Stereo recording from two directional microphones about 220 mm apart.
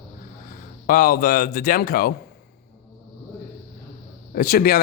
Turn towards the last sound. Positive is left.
turn(degrees=45)  # may be behind; listen again after turning